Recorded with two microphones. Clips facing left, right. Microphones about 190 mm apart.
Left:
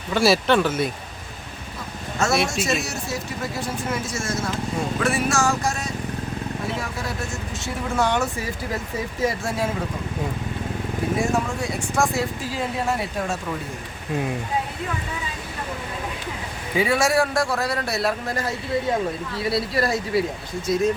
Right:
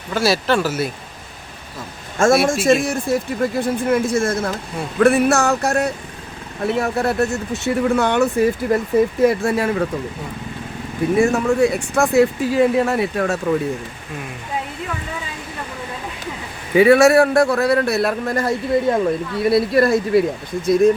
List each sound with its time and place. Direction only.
0.1 s speech: centre (ahead or behind)
2.1 s a man's voice: 50° right (ahead or behind); by 9.8 s 65° right (ahead or behind)
11.2 s speech: 65° right (ahead or behind)
16.7 s speech: 65° right (ahead or behind)